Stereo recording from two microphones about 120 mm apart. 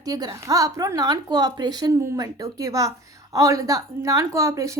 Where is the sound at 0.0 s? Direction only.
30° right (ahead or behind).